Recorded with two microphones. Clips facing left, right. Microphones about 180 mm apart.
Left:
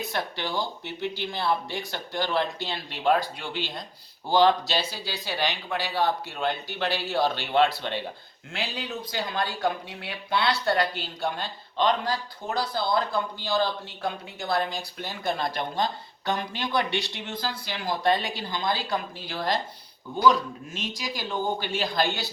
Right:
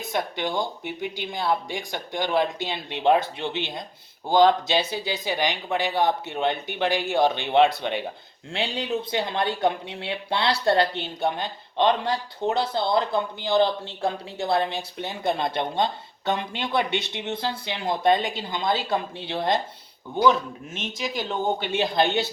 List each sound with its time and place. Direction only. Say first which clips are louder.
0.1 s speech: right 3 dB; 20° right (ahead or behind)
8.5 s speech: right 6 dB; 30° right (ahead or behind)
21.2 s speech: right 1 dB; 25° right (ahead or behind)